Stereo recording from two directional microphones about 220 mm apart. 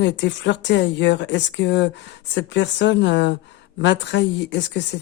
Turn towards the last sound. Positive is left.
turn(degrees=55)  # may be behind; listen again after turning